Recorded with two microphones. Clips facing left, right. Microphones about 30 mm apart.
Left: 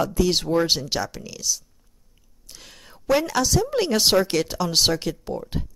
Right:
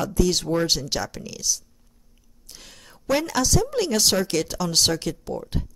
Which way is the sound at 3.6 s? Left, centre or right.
Centre.